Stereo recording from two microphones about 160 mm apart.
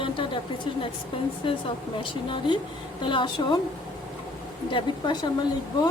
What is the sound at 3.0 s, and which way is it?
Speech, 30° left (ahead or behind).